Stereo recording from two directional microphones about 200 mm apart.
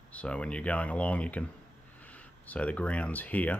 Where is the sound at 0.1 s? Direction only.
5° left (ahead or behind).